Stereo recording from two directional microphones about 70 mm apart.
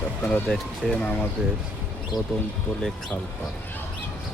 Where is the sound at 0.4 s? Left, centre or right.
Centre.